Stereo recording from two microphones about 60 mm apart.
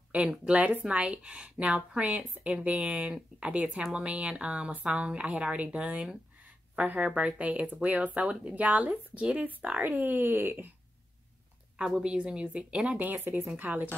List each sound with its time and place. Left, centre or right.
0.1 s speech: centre
7.2 s speech: right
11.8 s speech: centre; by 13.8 s right